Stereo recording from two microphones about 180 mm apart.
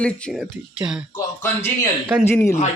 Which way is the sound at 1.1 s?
15° left (ahead or behind).